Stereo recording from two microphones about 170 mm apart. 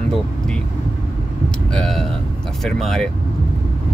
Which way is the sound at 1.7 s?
5° left (ahead or behind).